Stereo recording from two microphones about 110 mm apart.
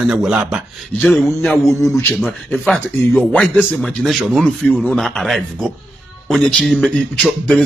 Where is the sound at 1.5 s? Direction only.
25° left (ahead or behind).